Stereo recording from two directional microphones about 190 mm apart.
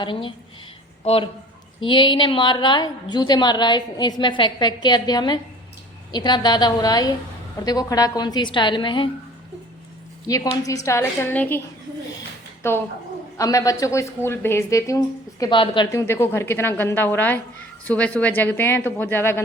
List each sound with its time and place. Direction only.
0.0 s a woman's voice: 25° left (ahead or behind)
10.2 s a woman's voice: 20° left (ahead or behind)
12.6 s a woman's voice: 15° left (ahead or behind)